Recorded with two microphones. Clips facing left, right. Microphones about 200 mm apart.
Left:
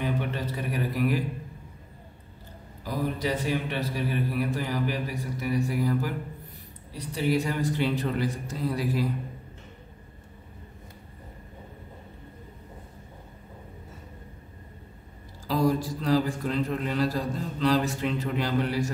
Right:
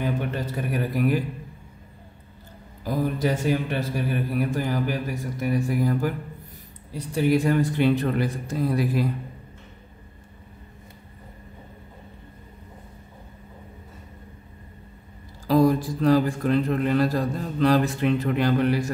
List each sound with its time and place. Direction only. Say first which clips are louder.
0.0 s a sound: right 3 dB; 50° right (ahead or behind)
2.8 s a man's voice: right 5 dB; 50° right (ahead or behind)
15.4 s a man's voice: right 6 dB; 55° right (ahead or behind)